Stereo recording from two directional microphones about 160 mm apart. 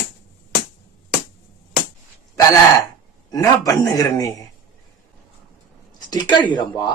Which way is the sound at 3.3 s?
20° left (ahead or behind).